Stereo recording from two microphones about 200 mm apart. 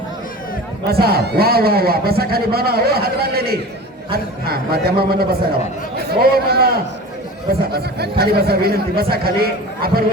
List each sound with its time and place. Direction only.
0.9 s a man's voice: 50° right (ahead or behind)